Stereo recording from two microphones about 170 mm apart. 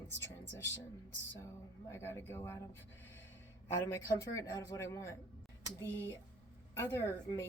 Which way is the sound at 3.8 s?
20° left (ahead or behind).